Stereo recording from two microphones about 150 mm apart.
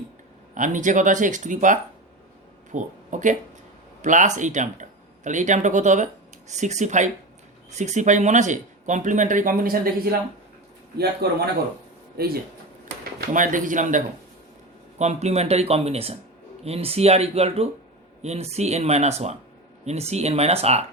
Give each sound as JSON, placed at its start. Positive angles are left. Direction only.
{"t": 0.5, "sound": "speech", "side_deg": -60}
{"t": 10.9, "sound": "a man's voice", "side_deg": -90}
{"t": 13.3, "sound": "speech", "side_deg": -60}